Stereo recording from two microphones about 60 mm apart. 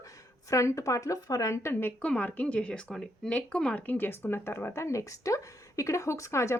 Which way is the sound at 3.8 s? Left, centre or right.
Left.